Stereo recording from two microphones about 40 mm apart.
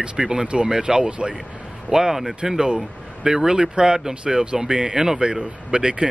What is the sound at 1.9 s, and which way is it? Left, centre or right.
Speech, centre.